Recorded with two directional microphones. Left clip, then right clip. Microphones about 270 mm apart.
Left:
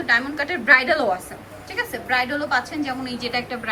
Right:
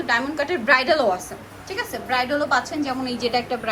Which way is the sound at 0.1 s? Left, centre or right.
Centre.